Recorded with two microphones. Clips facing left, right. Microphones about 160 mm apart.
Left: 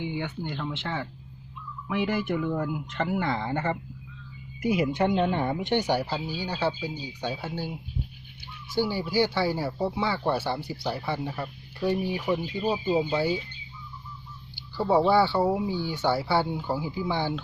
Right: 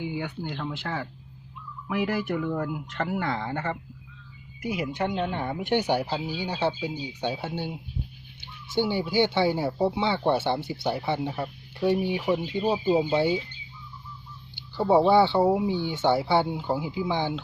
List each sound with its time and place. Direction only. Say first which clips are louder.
0.0 s speech: even; 5° right (ahead or behind)
3.5 s speech: left 2 dB; 15° left (ahead or behind)
4.9 s speech: left 4 dB; 20° left (ahead or behind)
5.5 s speech: right 1 dB; 15° right (ahead or behind)
14.5 s speech: right 2 dB; 20° right (ahead or behind)